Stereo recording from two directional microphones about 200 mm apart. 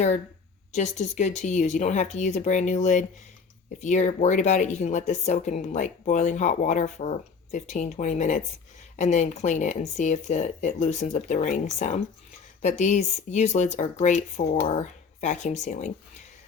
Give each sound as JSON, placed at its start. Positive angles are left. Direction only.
{"t": 0.7, "sound": "speech", "side_deg": 35}